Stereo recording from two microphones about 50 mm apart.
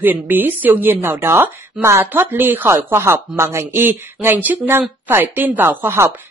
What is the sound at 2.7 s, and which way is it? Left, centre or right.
Speech, right.